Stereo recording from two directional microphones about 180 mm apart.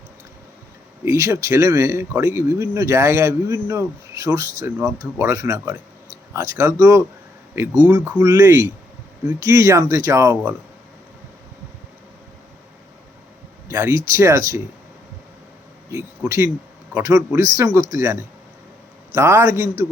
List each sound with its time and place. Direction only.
1.0 s speech: 15° right (ahead or behind)
13.7 s speech: 15° right (ahead or behind)
15.9 s speech: 10° right (ahead or behind)